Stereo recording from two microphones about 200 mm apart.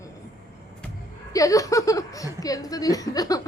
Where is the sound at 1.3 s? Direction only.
15° left (ahead or behind).